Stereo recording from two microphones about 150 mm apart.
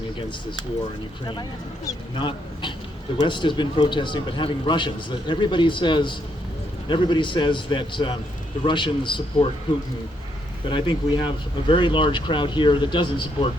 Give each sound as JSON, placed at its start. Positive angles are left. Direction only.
{"t": 1.3, "sound": "speech", "side_deg": 25}
{"t": 10.7, "sound": "speech", "side_deg": 35}